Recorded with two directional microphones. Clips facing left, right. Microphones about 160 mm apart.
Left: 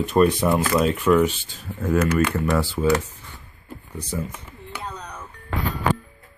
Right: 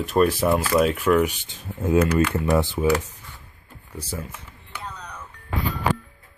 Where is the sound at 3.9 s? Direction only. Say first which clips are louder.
Left 3 dB; 5° right (ahead or behind).